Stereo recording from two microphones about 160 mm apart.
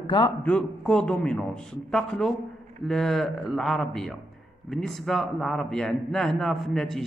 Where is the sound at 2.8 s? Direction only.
Centre (ahead or behind).